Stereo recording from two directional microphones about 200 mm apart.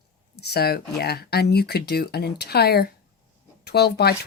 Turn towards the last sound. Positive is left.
turn(degrees=55)  # may be behind; listen again after turning